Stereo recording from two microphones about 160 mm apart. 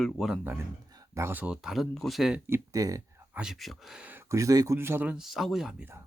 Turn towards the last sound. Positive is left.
turn(degrees=-5)  # may be behind; listen again after turning